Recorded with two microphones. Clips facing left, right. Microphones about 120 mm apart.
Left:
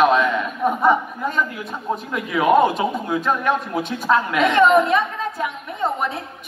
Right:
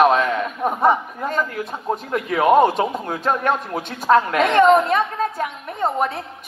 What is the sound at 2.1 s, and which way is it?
A woman's voice, 45° right (ahead or behind).